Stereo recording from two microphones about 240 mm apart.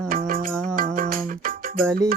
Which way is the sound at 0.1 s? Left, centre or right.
Right.